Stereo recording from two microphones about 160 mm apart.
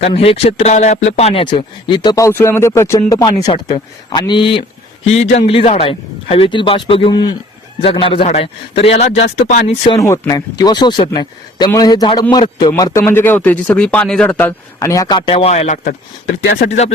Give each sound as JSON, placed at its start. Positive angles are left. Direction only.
{"t": 0.1, "sound": "speech", "side_deg": 35}
{"t": 5.0, "sound": "speech", "side_deg": 40}
{"t": 10.0, "sound": "speech", "side_deg": 20}
{"t": 15.3, "sound": "speech", "side_deg": 40}
{"t": 16.6, "sound": "speech", "side_deg": 45}